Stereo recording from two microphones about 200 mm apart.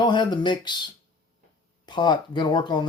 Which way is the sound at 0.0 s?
25° left (ahead or behind).